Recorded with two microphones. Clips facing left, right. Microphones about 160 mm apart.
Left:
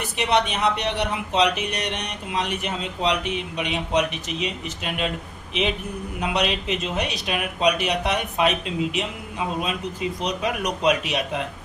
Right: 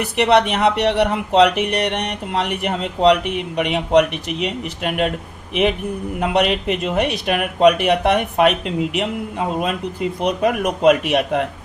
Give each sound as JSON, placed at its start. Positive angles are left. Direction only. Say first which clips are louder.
{"t": 0.0, "sound": "speech", "louder": "right 7 dB", "side_deg": -70}
{"t": 6.1, "sound": "speech", "louder": "right 6 dB", "side_deg": -55}